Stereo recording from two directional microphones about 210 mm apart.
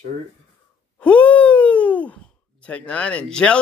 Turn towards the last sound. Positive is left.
turn(degrees=5)  # may be behind; listen again after turning